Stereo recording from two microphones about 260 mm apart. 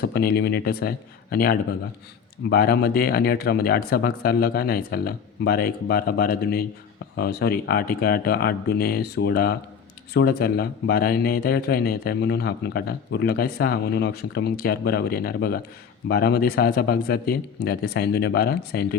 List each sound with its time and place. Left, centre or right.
0.0 s speech: left